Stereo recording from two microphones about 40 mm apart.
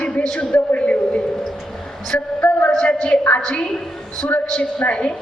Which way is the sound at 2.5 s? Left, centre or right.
Left.